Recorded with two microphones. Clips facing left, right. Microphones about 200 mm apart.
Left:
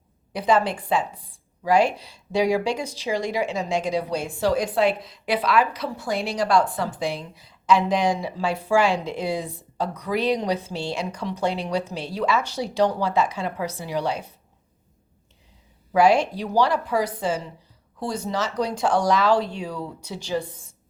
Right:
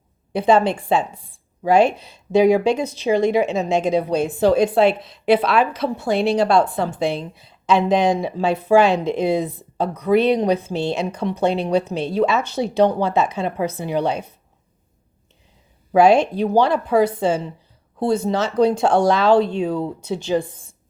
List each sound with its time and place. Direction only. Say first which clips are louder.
0.3 s a woman's voice: right 5 dB; 25° right (ahead or behind)
10.2 s speech: right 6 dB; 55° right (ahead or behind)
10.5 s a woman's voice: right 6 dB; 20° right (ahead or behind)
11.2 s speech: right 6 dB; 55° right (ahead or behind)
11.7 s a woman's voice: right 7 dB; 20° right (ahead or behind)
15.9 s a woman's voice: right 4 dB; 25° right (ahead or behind)